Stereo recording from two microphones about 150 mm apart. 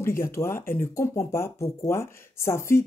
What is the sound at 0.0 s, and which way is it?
Speech, 15° left (ahead or behind).